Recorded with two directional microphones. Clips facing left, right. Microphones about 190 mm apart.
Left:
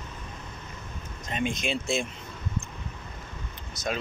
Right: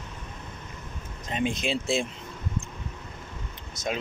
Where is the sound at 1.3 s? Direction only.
30° right (ahead or behind).